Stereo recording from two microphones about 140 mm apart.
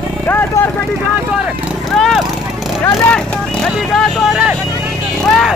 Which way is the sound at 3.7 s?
Centre (ahead or behind).